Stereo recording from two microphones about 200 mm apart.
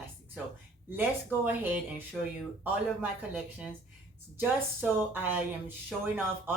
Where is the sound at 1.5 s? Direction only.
10° right (ahead or behind).